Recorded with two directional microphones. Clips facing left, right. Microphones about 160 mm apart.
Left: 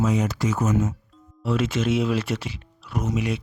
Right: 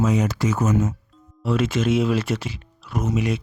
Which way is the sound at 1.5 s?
45° right (ahead or behind).